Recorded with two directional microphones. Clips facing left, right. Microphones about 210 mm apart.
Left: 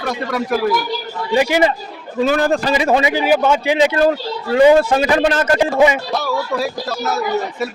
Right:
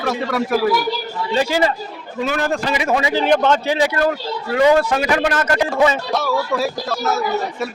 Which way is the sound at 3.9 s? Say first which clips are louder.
Left 4 dB; 30° left (ahead or behind).